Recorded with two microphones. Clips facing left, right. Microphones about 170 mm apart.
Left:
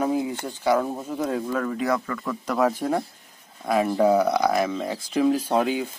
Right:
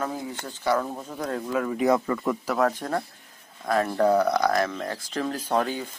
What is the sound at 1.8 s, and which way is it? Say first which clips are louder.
Speech: right 3 dB; 20° right (ahead or behind).